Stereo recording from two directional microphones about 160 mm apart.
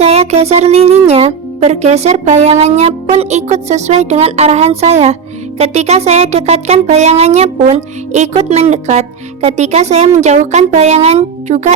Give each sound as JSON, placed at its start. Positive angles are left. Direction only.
{"t": 0.0, "sound": "speech", "side_deg": -40}